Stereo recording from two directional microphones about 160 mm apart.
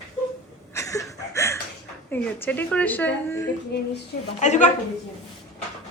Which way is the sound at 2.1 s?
10° left (ahead or behind).